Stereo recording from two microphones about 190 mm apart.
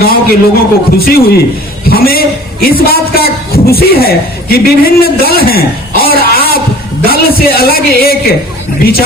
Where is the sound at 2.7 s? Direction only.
50° left (ahead or behind).